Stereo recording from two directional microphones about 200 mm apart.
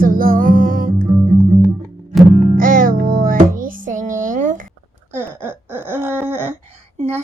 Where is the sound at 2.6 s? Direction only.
45° right (ahead or behind).